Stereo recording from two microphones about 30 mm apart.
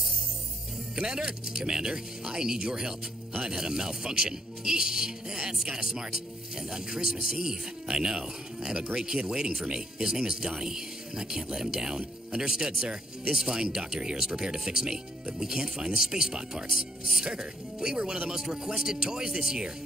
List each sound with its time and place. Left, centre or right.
0.9 s speech: right